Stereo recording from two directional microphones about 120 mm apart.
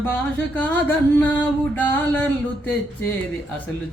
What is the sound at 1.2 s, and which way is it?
Music, 15° left (ahead or behind).